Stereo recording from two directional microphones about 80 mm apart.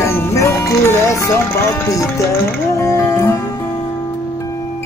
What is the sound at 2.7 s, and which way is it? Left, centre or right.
Music, left.